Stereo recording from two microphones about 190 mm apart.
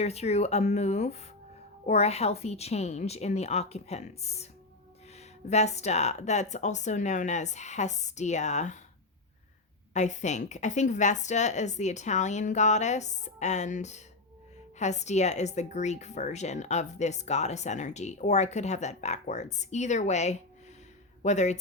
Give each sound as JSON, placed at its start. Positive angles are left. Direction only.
{"t": 0.0, "sound": "speech", "side_deg": 35}
{"t": 9.9, "sound": "speech", "side_deg": 40}